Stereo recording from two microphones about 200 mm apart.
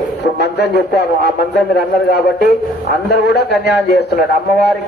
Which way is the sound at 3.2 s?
55° left (ahead or behind).